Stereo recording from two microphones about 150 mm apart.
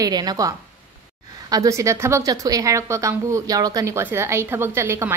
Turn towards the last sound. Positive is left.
turn(degrees=-20)  # may be behind; listen again after turning